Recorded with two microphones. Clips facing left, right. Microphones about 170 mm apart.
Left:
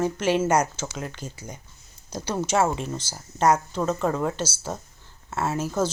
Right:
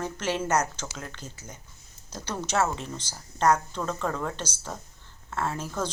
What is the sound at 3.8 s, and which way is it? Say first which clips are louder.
Speech: left 6 dB; 20° left (ahead or behind).